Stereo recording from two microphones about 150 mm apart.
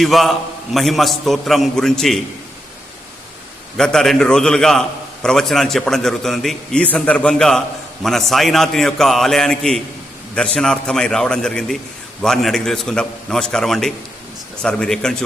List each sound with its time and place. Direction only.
0.0 s a man's voice: centre (ahead or behind)
3.8 s a man's voice: 5° left (ahead or behind)